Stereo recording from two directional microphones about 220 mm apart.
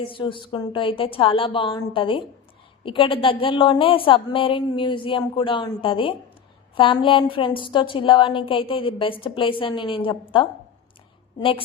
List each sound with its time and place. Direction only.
0.0 s a woman's voice: 25° left (ahead or behind)
11.3 s a woman's voice: 25° left (ahead or behind)